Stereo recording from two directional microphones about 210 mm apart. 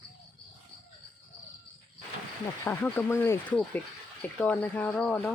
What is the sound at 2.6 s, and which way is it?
Speech, 10° left (ahead or behind).